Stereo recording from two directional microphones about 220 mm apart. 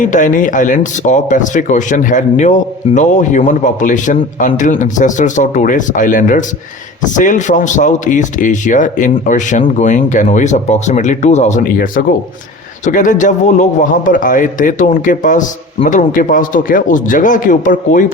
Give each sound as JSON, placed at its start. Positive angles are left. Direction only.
{"t": 0.0, "sound": "speech", "side_deg": 35}